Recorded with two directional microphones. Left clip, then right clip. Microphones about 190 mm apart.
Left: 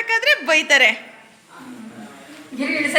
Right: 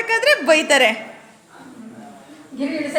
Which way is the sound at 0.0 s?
Centre (ahead or behind).